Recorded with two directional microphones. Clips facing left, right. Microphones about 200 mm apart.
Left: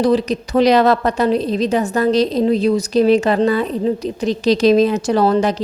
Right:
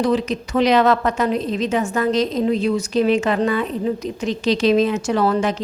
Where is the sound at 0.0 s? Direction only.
35° left (ahead or behind).